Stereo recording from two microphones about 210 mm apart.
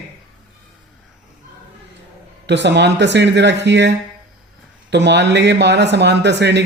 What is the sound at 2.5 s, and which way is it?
Speech, 55° right (ahead or behind).